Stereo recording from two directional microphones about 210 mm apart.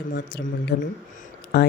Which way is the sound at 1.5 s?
50° left (ahead or behind).